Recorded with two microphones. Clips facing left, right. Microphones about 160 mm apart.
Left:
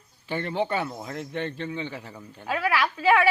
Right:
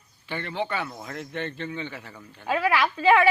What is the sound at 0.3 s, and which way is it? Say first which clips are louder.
A man's voice: left 3 dB; 40° left (ahead or behind).